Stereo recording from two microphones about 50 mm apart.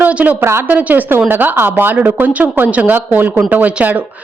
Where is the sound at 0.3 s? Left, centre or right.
Right.